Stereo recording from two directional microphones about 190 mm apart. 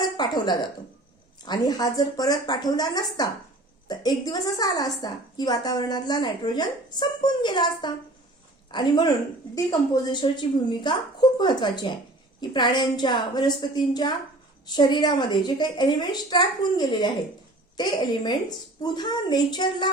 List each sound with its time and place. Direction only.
0.0 s a woman's voice: 20° left (ahead or behind)